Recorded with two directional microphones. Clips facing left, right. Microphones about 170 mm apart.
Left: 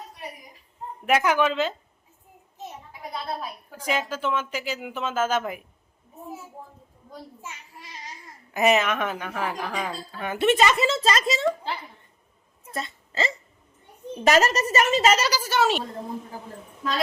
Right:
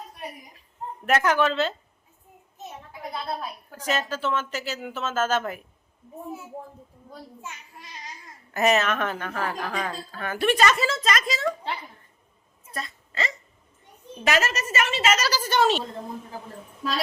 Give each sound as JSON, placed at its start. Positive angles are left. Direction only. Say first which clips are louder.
{"t": 1.0, "sound": "a woman's voice", "louder": "even", "side_deg": 10}
{"t": 3.7, "sound": "a woman's voice", "louder": "even", "side_deg": 10}
{"t": 8.5, "sound": "a woman's voice", "louder": "left 1 dB", "side_deg": 15}
{"t": 12.7, "sound": "speech", "louder": "left 3 dB", "side_deg": 25}
{"t": 14.3, "sound": "a woman's voice", "louder": "left 5 dB", "side_deg": 40}
{"t": 15.3, "sound": "a woman's voice", "louder": "right 1 dB", "side_deg": 10}